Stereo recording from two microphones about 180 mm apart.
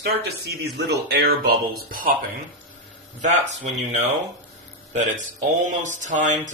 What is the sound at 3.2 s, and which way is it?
Speech, 40° right (ahead or behind).